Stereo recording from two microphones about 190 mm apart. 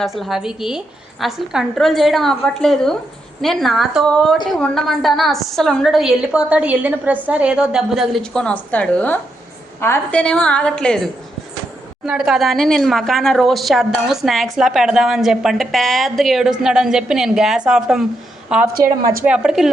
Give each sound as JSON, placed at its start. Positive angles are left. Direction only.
{"t": 0.0, "sound": "a woman's voice", "side_deg": 0}
{"t": 18.8, "sound": "speech", "side_deg": -20}
{"t": 19.2, "sound": "a woman's voice", "side_deg": -5}